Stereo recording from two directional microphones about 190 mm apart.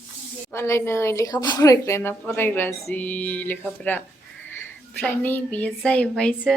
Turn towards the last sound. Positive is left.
turn(degrees=5)  # may be behind; listen again after turning